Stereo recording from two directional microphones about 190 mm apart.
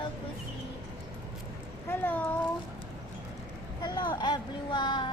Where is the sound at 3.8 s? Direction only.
20° left (ahead or behind).